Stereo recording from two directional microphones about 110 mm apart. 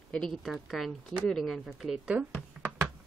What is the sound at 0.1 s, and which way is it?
A woman's voice, 5° left (ahead or behind).